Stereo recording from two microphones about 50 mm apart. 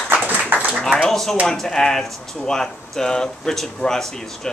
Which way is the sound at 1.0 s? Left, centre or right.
Centre.